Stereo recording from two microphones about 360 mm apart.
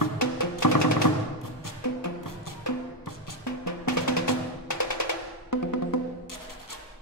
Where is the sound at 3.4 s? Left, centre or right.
Left.